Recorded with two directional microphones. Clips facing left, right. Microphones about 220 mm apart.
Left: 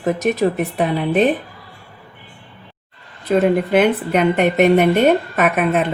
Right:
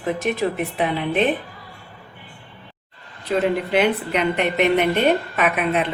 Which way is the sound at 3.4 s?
50° left (ahead or behind).